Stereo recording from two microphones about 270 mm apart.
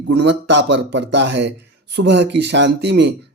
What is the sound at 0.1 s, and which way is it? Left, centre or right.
Speech, right.